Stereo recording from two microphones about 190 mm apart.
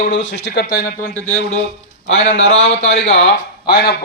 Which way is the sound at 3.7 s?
55° left (ahead or behind).